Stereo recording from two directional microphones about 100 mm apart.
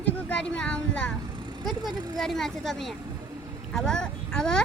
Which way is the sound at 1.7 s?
45° right (ahead or behind).